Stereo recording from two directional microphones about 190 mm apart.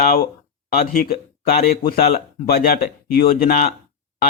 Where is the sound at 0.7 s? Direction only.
50° left (ahead or behind).